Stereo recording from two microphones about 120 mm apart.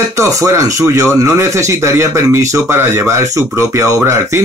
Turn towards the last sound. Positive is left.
turn(degrees=-25)  # may be behind; listen again after turning